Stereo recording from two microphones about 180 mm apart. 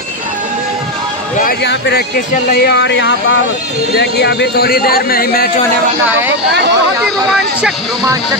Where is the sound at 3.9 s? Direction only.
65° left (ahead or behind).